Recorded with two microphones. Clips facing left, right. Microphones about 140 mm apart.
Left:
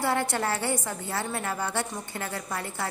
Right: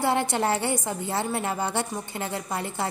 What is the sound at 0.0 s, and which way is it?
A woman's voice, 20° right (ahead or behind).